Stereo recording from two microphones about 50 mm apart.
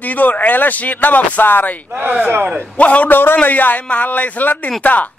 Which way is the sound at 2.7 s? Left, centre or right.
Left.